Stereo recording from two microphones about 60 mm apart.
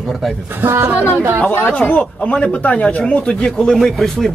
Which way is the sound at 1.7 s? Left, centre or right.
Left.